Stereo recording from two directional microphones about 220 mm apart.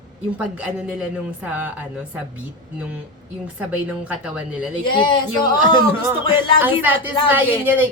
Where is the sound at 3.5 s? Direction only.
5° right (ahead or behind).